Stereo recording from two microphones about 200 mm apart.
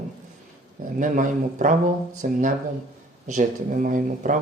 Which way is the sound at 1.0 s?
40° right (ahead or behind).